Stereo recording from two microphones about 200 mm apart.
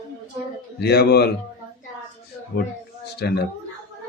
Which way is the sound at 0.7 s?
55° left (ahead or behind).